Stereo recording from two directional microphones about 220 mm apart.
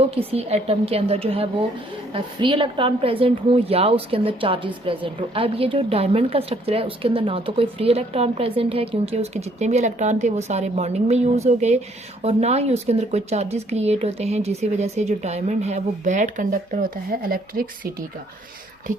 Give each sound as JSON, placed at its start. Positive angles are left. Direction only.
{"t": 0.2, "sound": "a woman's voice", "side_deg": -25}